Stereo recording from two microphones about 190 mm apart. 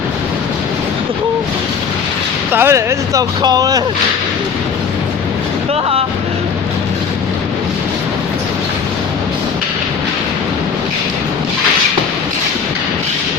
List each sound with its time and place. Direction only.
2.5 s speech: 10° right (ahead or behind)